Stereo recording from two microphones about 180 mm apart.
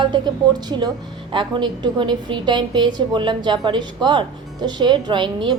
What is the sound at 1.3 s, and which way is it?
A woman's voice, 25° right (ahead or behind).